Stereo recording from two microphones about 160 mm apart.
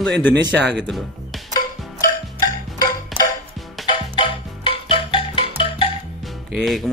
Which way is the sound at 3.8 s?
30° left (ahead or behind).